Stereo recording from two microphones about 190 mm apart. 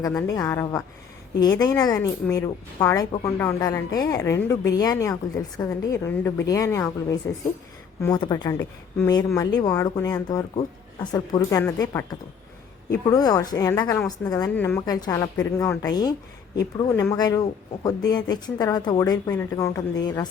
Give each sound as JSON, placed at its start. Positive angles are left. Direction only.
{"t": 0.1, "sound": "a woman's voice", "side_deg": 15}
{"t": 14.5, "sound": "a woman's voice", "side_deg": 10}
{"t": 14.8, "sound": "speech", "side_deg": 20}